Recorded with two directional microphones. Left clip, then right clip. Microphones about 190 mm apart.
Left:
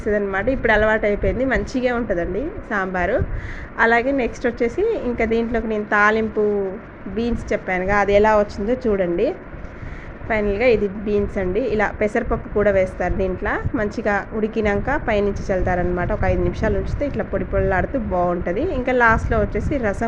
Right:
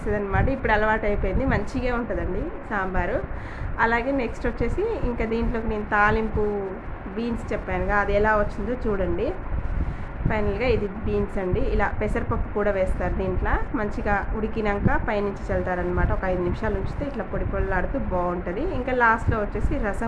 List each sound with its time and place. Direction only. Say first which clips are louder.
0.0 s a woman's voice: left 5 dB; 15° left (ahead or behind)